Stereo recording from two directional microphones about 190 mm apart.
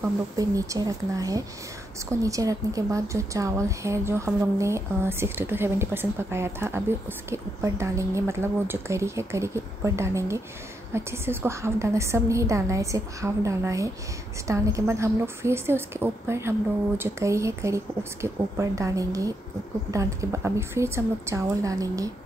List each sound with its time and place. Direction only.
0.4 s a woman's voice: 20° right (ahead or behind)